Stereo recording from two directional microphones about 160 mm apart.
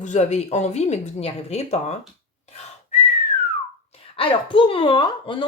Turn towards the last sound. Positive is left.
turn(degrees=30)  # may be behind; listen again after turning